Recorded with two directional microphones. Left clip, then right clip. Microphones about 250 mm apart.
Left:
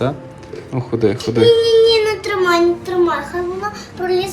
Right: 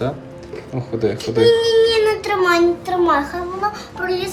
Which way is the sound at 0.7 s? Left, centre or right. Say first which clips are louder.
Left 4 dB; centre.